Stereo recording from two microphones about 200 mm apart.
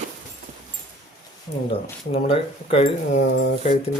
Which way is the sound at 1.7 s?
25° left (ahead or behind).